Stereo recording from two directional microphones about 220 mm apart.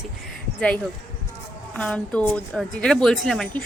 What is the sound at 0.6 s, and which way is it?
A woman's voice, 5° left (ahead or behind).